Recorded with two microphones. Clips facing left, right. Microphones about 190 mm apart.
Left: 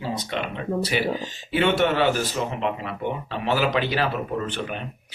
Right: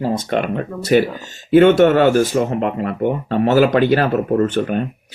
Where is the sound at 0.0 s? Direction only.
50° right (ahead or behind).